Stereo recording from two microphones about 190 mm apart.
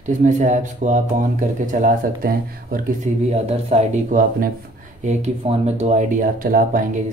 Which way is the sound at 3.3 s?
35° right (ahead or behind).